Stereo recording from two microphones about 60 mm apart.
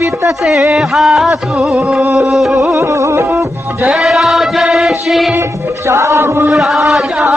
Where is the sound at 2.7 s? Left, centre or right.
Right.